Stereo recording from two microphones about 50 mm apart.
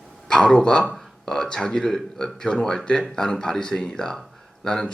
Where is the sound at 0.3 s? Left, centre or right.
Centre.